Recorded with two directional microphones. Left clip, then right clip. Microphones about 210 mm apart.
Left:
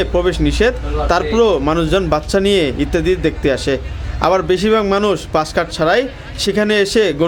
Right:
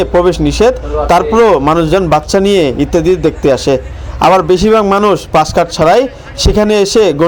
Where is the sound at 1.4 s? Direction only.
10° right (ahead or behind).